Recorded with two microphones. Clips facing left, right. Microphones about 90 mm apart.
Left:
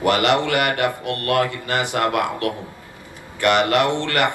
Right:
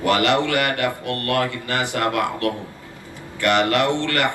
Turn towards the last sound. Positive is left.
turn(degrees=20)  # may be behind; listen again after turning